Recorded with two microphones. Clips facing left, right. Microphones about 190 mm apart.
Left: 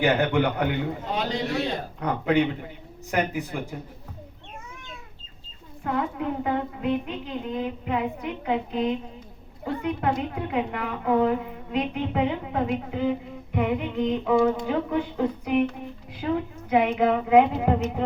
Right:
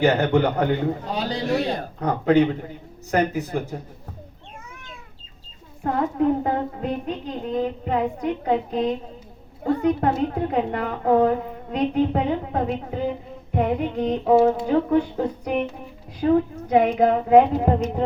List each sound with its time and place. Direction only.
0.0 s a woman's voice: 35° right (ahead or behind)
5.8 s a woman's voice: 40° right (ahead or behind)
16.2 s a woman's voice: 40° right (ahead or behind)